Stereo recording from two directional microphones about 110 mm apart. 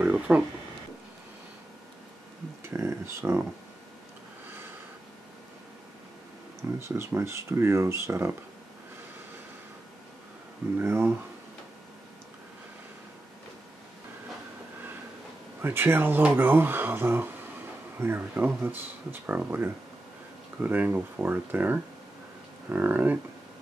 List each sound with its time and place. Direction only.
0.0 s a sound: 15° right (ahead or behind)
2.7 s speech: 25° right (ahead or behind)
6.6 s speech: 20° right (ahead or behind)
10.8 s speech: 20° right (ahead or behind)
15.6 s speech: 20° right (ahead or behind)